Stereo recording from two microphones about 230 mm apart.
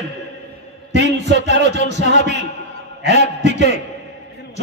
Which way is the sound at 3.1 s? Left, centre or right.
Right.